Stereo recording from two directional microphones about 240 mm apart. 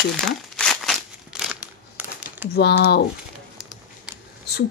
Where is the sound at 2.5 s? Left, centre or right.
Left.